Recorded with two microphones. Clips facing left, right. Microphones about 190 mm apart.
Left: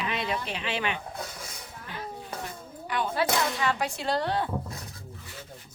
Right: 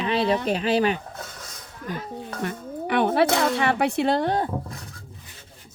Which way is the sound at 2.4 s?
65° right (ahead or behind).